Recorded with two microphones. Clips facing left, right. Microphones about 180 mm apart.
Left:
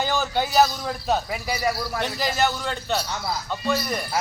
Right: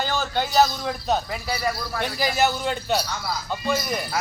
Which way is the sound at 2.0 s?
5° right (ahead or behind).